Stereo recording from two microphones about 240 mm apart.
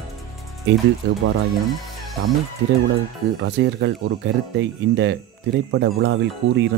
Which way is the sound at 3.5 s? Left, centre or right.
Right.